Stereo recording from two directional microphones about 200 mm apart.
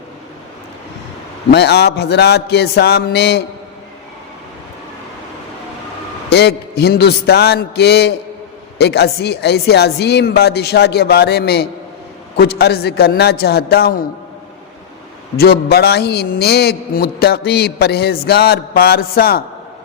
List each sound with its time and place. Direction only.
1.5 s speech: 55° left (ahead or behind)
6.3 s a man's voice: 55° left (ahead or behind)
15.4 s a man's voice: 50° left (ahead or behind)